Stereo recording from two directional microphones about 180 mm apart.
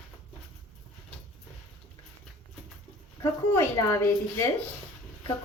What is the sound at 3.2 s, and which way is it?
A woman's voice, 15° left (ahead or behind).